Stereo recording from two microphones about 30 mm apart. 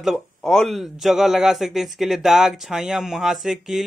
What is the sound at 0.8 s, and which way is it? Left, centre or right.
Speech, centre.